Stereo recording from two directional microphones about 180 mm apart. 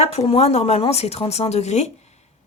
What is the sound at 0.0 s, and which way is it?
Speech, 35° left (ahead or behind).